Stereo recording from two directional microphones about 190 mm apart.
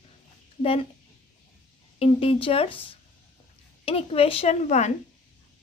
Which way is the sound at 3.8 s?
30° left (ahead or behind).